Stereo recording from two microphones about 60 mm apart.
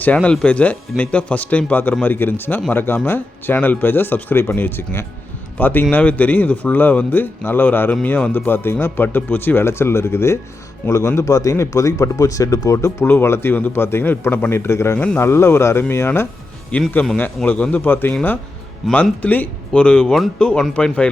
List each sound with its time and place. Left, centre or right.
0.2 s speech: centre; by 13.1 s left
13.1 s speech: left
14.5 s speech: left
14.9 s speech: left
15.2 s speech: left
16.7 s speech: left
17.4 s speech: centre
17.8 s speech: left
20.1 s speech: centre
20.4 s speech: centre